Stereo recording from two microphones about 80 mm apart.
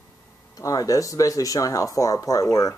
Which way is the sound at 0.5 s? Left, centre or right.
Left.